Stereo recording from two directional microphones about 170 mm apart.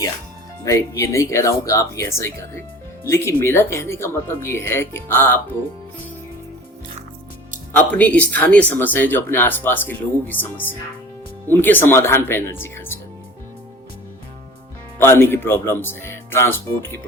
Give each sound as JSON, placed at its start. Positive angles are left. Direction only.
{"t": 0.6, "sound": "speech", "side_deg": 15}
{"t": 7.8, "sound": "speech", "side_deg": 10}
{"t": 14.9, "sound": "speech", "side_deg": 15}